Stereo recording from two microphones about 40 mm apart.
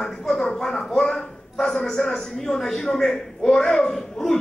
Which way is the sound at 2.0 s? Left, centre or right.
Centre.